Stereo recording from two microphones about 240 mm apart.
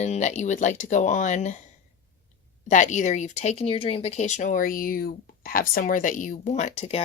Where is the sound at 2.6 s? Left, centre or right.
Left.